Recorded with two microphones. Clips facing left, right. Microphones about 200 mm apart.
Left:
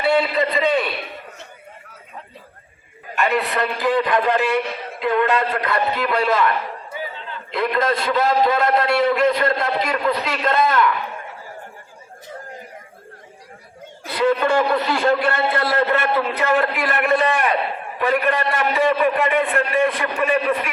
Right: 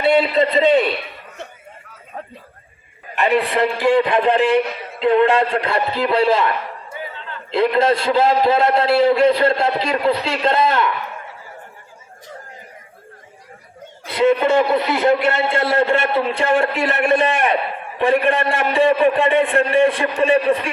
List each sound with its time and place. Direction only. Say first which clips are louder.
0.0 s a man's voice: right 3 dB; 20° right (ahead or behind)
2.1 s a sound: right 7 dB; 50° right (ahead or behind)
3.2 s a man's voice: right 4 dB; 30° right (ahead or behind)
7.5 s a man's voice: right 5 dB; 30° right (ahead or behind)
14.1 s a man's voice: right 3 dB; 25° right (ahead or behind)